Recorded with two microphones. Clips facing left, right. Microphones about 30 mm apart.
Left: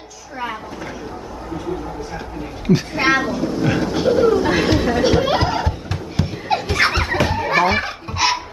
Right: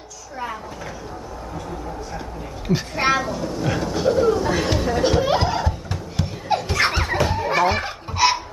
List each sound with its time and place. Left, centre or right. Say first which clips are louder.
2.6 s speech: left 4 dB; centre
4.4 s speech: left 4 dB; left
5.0 s speech: left 2 dB; left
5.9 s a sound: left 4 dB; left
7.6 s speech: left 2 dB; left